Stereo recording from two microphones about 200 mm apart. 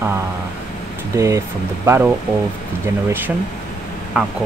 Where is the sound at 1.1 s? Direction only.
15° right (ahead or behind).